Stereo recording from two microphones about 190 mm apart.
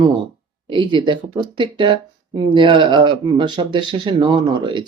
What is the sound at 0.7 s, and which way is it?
Speech, 25° right (ahead or behind).